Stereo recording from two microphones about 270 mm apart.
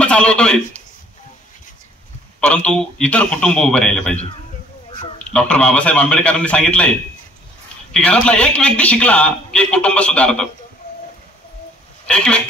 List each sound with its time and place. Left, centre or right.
0.0 s a man's voice: centre
2.4 s a man's voice: centre
4.8 s a sound: centre
5.3 s a man's voice: centre
7.9 s a man's voice: centre
12.1 s a man's voice: centre